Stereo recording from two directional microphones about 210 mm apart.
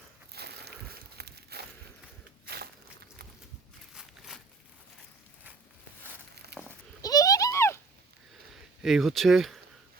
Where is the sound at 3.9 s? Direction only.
Centre (ahead or behind).